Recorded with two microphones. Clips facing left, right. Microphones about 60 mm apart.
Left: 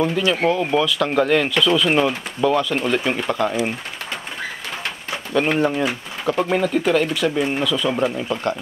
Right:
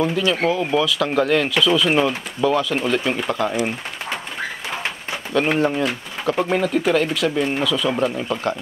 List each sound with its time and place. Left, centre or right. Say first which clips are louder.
0.2 s speech: left 1 dB; centre
5.3 s speech: even; centre